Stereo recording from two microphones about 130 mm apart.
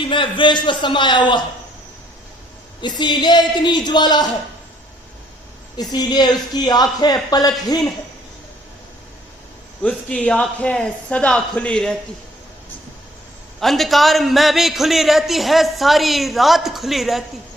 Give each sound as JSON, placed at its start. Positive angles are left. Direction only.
{"t": 0.0, "sound": "speech", "side_deg": 40}
{"t": 2.8, "sound": "speech", "side_deg": 35}
{"t": 5.7, "sound": "speech", "side_deg": 35}
{"t": 9.8, "sound": "speech", "side_deg": 10}
{"t": 13.6, "sound": "a man's voice", "side_deg": 0}